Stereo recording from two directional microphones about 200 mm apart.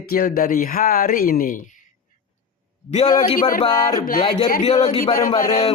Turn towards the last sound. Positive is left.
turn(degrees=40)  # may be behind; listen again after turning